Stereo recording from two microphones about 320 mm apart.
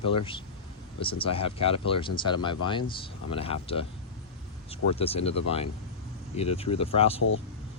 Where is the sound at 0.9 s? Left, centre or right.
Centre.